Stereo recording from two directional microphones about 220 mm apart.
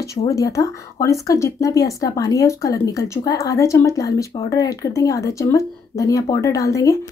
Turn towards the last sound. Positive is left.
turn(degrees=15)  # may be behind; listen again after turning